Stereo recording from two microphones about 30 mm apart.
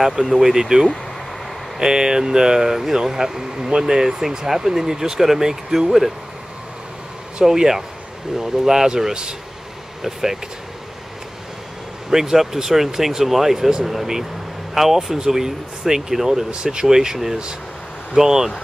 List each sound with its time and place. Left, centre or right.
0.3 s speech: centre
7.4 s speech: centre
10.0 s speech: centre
12.1 s speech: centre
16.4 s speech: right